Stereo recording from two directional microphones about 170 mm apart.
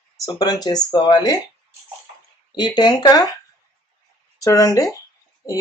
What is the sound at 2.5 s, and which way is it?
Speech, 25° left (ahead or behind).